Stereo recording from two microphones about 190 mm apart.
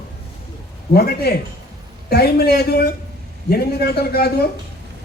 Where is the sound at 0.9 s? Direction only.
55° left (ahead or behind).